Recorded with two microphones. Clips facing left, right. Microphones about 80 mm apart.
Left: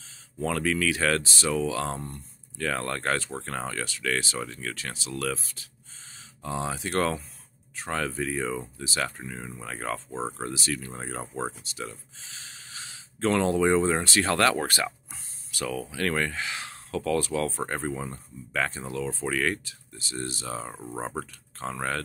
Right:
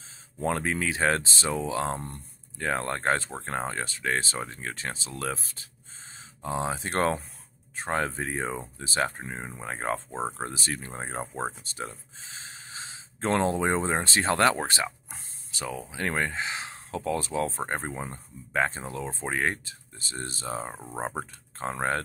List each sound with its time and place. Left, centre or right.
0.4 s speech: right
15.0 s a sound: right
15.6 s speech: centre